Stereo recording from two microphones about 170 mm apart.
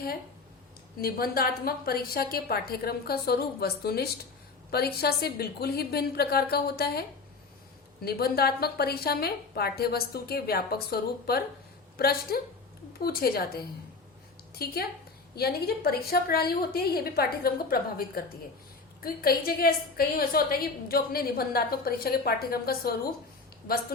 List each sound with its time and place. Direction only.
0.9 s a woman's voice: 60° left (ahead or behind)
8.0 s a woman's voice: 65° left (ahead or behind)